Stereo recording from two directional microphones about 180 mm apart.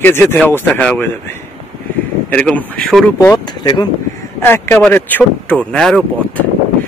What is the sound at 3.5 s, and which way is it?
Speech, 25° left (ahead or behind).